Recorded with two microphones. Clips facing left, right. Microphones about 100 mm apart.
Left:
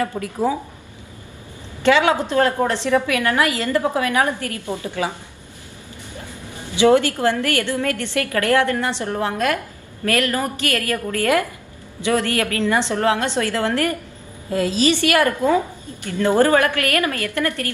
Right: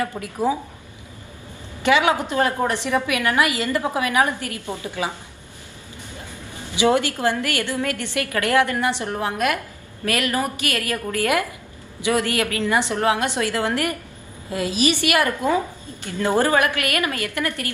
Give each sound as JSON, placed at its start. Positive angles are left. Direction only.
{"t": 1.8, "sound": "a woman's voice", "side_deg": -15}
{"t": 6.7, "sound": "a woman's voice", "side_deg": -20}